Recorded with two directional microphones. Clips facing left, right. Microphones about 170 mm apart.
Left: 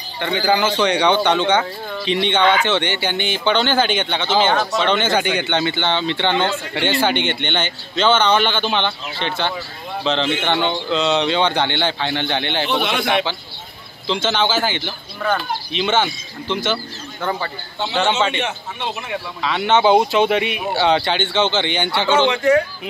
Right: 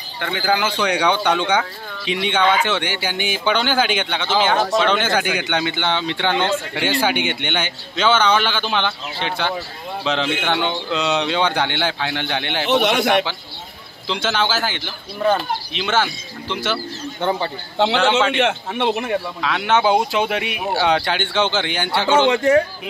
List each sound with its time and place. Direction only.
0.2 s speech: 5° right (ahead or behind)
15.1 s speech: 25° right (ahead or behind)
15.7 s speech: centre (ahead or behind)
17.2 s speech: 20° right (ahead or behind)
17.7 s a man's voice: 90° right
18.4 s a man's voice: 65° right (ahead or behind)
19.4 s speech: centre (ahead or behind)
22.3 s speech: 35° right (ahead or behind)